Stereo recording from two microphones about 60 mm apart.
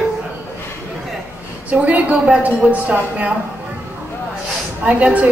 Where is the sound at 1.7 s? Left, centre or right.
Right.